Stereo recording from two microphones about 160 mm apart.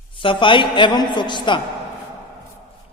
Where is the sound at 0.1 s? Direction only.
30° left (ahead or behind).